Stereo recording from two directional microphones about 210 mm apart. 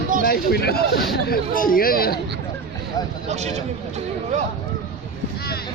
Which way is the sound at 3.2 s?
30° right (ahead or behind).